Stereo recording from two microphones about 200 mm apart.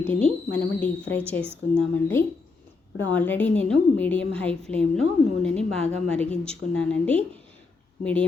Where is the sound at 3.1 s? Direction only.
5° left (ahead or behind).